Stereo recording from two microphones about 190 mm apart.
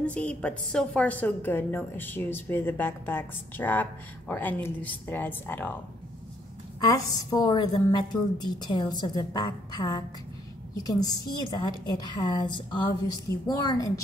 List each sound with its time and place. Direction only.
0.0 s a woman's voice: 5° left (ahead or behind)
6.9 s a woman's voice: 15° left (ahead or behind)